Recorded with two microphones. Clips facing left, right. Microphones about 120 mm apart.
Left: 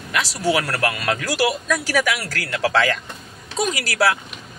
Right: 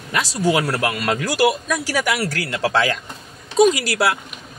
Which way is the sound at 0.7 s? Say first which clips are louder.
Right 1 dB; 10° right (ahead or behind).